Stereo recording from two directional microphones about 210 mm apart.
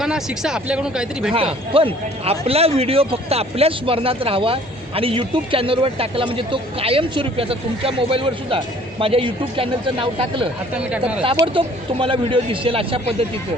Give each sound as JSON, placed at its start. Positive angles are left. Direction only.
{"t": 0.0, "sound": "speech", "side_deg": -5}
{"t": 1.7, "sound": "speech", "side_deg": -25}
{"t": 10.9, "sound": "speech", "side_deg": -5}
{"t": 11.4, "sound": "speech", "side_deg": -25}